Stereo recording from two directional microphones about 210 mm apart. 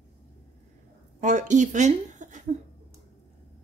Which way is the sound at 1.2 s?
35° right (ahead or behind).